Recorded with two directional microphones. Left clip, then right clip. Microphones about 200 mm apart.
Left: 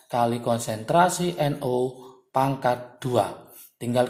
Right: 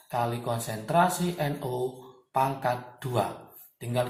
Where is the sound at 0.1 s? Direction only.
50° left (ahead or behind).